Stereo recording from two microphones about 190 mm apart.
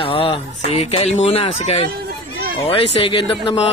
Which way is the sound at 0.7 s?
35° left (ahead or behind).